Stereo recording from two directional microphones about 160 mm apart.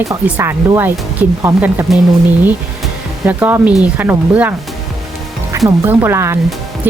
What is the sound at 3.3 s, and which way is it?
Speech, 10° right (ahead or behind).